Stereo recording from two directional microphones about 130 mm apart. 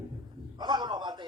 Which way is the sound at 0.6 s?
35° right (ahead or behind).